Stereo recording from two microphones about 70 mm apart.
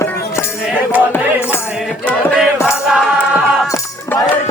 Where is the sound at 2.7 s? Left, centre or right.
Centre.